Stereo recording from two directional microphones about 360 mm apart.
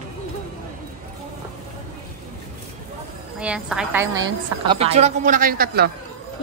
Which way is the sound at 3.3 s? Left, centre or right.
Centre.